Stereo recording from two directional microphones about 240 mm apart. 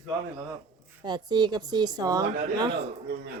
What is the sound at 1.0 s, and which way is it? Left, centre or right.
A woman's voice, centre.